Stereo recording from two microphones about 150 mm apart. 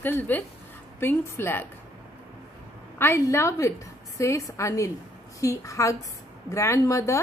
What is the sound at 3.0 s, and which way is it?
A woman's voice, 15° left (ahead or behind).